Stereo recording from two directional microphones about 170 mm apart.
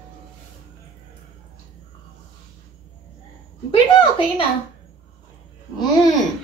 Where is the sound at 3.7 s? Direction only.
30° left (ahead or behind).